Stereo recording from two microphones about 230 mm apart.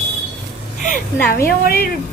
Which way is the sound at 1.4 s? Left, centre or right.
Left.